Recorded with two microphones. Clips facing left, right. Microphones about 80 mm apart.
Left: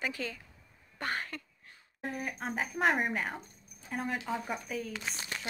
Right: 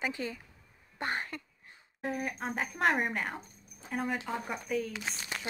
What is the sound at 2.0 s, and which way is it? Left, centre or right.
Speech, centre.